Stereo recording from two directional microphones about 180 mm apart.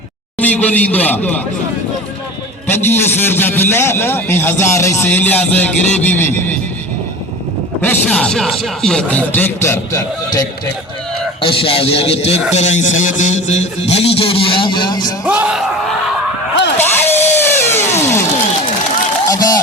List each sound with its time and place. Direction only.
0.3 s a man's voice: 10° left (ahead or behind)
2.6 s a man's voice: 10° left (ahead or behind)
7.8 s a man's voice: 10° left (ahead or behind)
11.3 s a man's voice: 30° left (ahead or behind)
15.2 s speech: 5° right (ahead or behind)
16.7 s music: 10° left (ahead or behind)
19.3 s speech: 20° left (ahead or behind)